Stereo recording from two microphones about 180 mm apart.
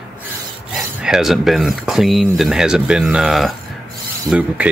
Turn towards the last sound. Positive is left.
turn(degrees=-5)  # may be behind; listen again after turning